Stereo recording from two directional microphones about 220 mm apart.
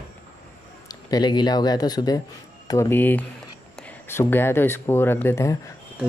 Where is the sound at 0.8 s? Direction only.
20° left (ahead or behind).